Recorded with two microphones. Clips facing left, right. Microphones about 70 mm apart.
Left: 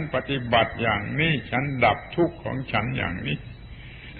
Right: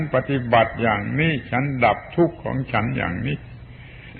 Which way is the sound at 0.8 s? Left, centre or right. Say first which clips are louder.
Right 4 dB; centre.